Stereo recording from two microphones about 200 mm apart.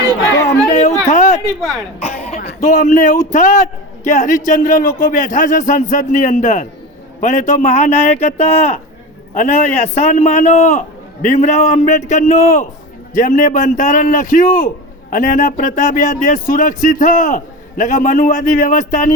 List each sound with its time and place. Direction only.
0.7 s a sound: 35° left (ahead or behind)
2.0 s cough: 30° left (ahead or behind)
2.6 s a man's voice: 40° left (ahead or behind)